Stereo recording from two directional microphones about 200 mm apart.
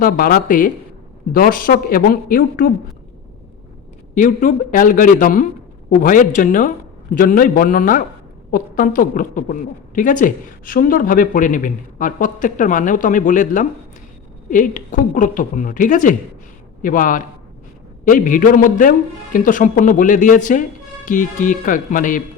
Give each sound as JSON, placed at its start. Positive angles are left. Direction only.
{"t": 0.0, "sound": "a man's voice", "side_deg": 45}
{"t": 4.1, "sound": "a woman's voice", "side_deg": 40}